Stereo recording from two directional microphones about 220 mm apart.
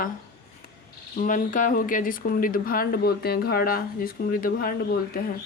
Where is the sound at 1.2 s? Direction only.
35° left (ahead or behind).